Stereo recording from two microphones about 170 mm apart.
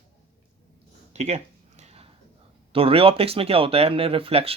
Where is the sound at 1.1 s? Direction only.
40° right (ahead or behind).